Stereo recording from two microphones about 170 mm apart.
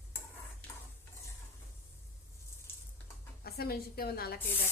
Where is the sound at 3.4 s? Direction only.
65° left (ahead or behind).